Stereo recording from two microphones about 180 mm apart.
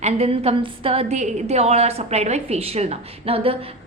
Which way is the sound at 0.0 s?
35° right (ahead or behind).